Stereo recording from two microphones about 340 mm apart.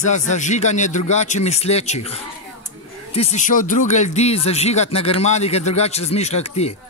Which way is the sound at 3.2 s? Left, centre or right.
Centre.